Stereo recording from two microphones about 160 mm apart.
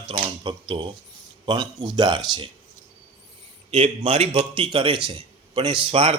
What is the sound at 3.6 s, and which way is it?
A man's voice, 35° right (ahead or behind).